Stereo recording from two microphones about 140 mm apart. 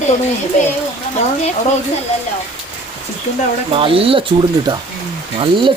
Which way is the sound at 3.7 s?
40° right (ahead or behind).